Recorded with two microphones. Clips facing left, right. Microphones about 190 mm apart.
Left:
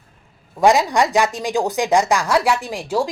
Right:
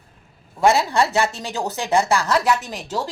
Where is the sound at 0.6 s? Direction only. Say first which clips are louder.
Left 2 dB; 15° left (ahead or behind).